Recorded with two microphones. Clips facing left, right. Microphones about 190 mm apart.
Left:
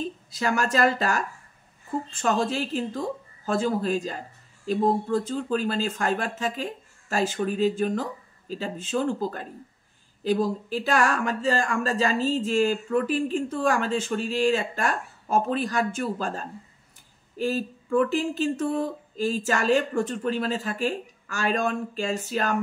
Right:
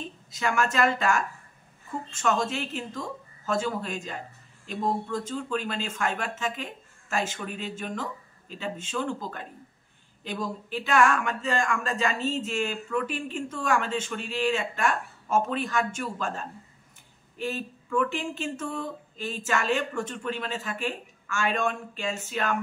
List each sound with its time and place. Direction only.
0.0 s speech: 35° left (ahead or behind)